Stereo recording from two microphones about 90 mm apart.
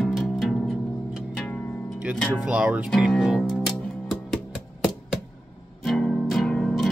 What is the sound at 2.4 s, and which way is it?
Speech, 15° right (ahead or behind).